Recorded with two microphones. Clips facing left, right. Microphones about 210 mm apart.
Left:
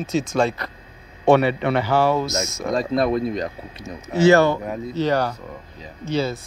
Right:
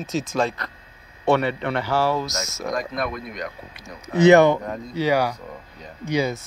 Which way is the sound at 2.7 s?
30° left (ahead or behind).